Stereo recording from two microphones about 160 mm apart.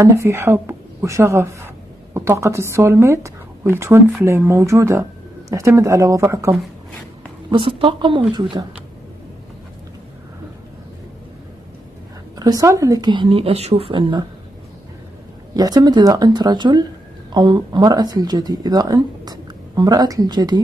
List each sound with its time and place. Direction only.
0.0 s a woman's voice: 20° right (ahead or behind)
7.5 s speech: 30° right (ahead or behind)
12.4 s speech: 20° right (ahead or behind)
15.5 s speech: 25° right (ahead or behind)